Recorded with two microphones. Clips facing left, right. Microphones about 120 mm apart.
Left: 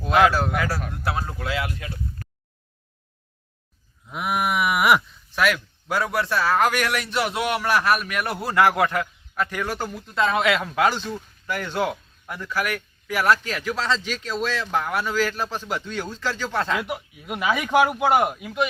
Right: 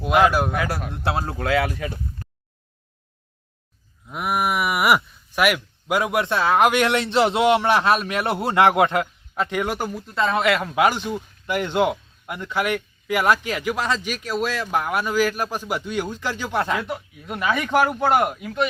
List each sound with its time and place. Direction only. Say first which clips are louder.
0.0 s speech: right 1 dB; 15° right (ahead or behind); by 1.4 s 30° right (ahead or behind)
4.1 s speech: right 1 dB; centre (ahead or behind)
9.9 s speech: left 3 dB; centre (ahead or behind)
16.8 s speech: right 1 dB; 10° left (ahead or behind)